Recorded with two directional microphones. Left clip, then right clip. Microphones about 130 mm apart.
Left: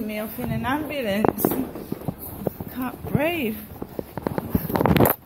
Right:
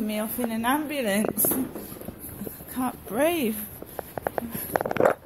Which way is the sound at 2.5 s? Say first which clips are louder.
Right 1 dB; 85° right.